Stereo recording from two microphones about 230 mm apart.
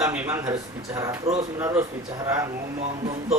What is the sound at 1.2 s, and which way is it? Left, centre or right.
Speech, right.